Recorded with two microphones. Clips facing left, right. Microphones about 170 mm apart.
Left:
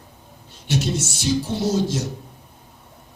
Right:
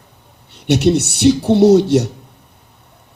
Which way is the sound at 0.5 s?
65° right (ahead or behind).